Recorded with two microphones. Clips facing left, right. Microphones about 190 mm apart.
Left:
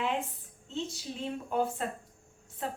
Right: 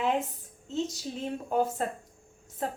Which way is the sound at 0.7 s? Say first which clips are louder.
Right 5 dB; 40° right (ahead or behind).